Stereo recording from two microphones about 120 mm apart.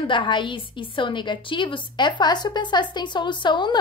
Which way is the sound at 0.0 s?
45° left (ahead or behind).